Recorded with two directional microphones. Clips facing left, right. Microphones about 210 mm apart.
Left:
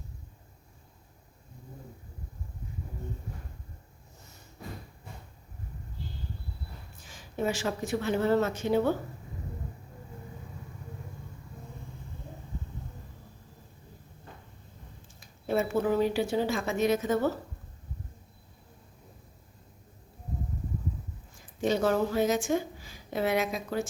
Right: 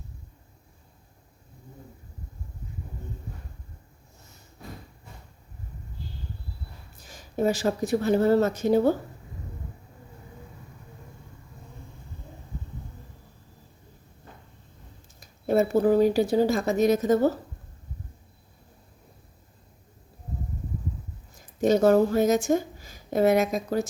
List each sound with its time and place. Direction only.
6.9 s speech: 40° right (ahead or behind)
15.2 s speech: 40° right (ahead or behind)
21.3 s speech: 40° right (ahead or behind)